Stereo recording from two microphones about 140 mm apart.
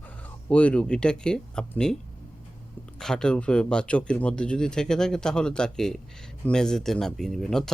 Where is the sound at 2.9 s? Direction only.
5° left (ahead or behind).